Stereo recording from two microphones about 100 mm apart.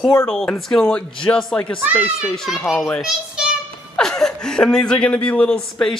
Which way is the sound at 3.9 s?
5° left (ahead or behind).